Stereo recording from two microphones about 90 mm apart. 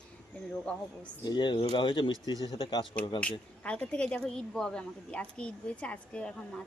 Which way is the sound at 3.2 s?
15° left (ahead or behind).